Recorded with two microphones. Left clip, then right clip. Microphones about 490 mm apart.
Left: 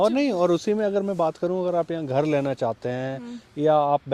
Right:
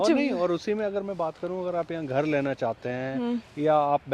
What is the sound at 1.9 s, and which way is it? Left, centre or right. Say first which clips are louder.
Speech: left 3 dB; left.